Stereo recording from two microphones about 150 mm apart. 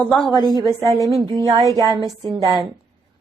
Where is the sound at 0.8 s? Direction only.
25° right (ahead or behind).